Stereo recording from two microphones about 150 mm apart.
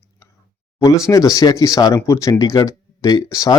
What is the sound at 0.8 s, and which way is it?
Speech, 20° left (ahead or behind).